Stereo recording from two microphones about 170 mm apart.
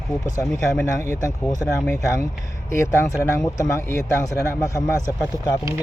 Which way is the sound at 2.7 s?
15° left (ahead or behind).